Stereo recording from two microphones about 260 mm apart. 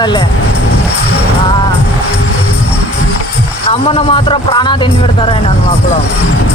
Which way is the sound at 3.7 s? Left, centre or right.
Left.